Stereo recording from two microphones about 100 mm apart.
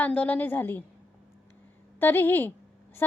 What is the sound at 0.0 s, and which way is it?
Speech, 15° left (ahead or behind).